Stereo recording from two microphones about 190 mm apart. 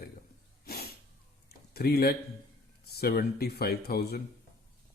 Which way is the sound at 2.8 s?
55° left (ahead or behind).